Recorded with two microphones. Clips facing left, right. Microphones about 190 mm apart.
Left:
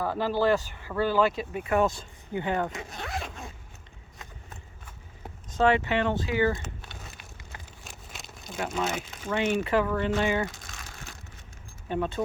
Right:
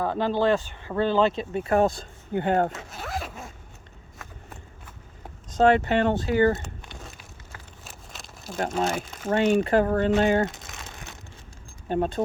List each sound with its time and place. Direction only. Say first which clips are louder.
0.0 s speech: right 2 dB; 20° right (ahead or behind); by 2.0 s 35° right (ahead or behind)
2.3 s speech: right 5 dB; 50° right (ahead or behind)
2.9 s zipper: right 2 dB; centre (ahead or behind)
5.5 s speech: right 4 dB; 45° right (ahead or behind)
7.9 s a sound: right 1 dB; centre (ahead or behind)
8.5 s speech: right 4 dB; 50° right (ahead or behind)
10.4 s crumpling: right 5 dB; 25° right (ahead or behind)
11.9 s speech: right 4 dB; 40° right (ahead or behind)